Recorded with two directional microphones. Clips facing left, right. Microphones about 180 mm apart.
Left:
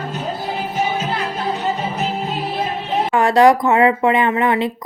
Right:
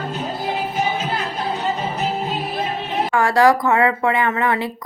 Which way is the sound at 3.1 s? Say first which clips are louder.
Left 3 dB; 20° left (ahead or behind).